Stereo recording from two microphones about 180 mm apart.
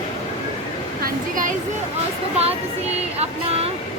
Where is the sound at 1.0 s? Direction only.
50° right (ahead or behind).